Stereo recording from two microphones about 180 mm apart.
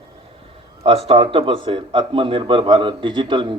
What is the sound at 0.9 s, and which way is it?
Speech, 30° right (ahead or behind).